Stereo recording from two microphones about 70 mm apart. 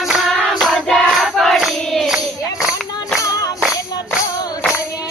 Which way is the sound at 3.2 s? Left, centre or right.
Left.